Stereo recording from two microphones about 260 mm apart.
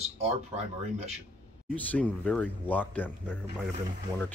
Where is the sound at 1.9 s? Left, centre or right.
Centre.